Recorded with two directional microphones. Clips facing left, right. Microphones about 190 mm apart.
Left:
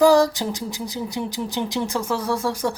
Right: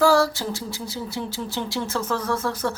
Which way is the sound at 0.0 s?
15° left (ahead or behind).